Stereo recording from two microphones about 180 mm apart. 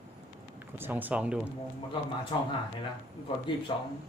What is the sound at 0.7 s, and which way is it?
Speech, 10° right (ahead or behind).